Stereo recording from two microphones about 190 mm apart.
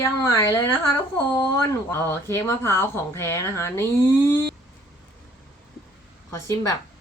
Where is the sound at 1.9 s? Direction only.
15° left (ahead or behind).